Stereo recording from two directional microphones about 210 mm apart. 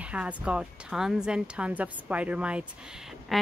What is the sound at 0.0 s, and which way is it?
Speech, 5° right (ahead or behind).